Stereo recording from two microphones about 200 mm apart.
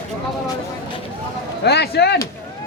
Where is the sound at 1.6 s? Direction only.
55° left (ahead or behind).